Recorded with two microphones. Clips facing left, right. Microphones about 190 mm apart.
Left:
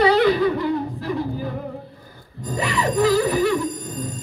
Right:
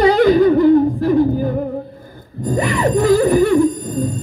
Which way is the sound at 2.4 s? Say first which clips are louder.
Right 7 dB; 55° right (ahead or behind).